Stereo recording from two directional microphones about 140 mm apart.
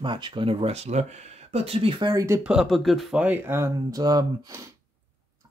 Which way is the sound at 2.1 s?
20° right (ahead or behind).